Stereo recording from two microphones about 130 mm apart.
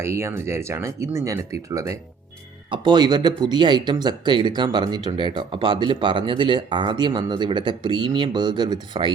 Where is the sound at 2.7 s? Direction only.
40° right (ahead or behind).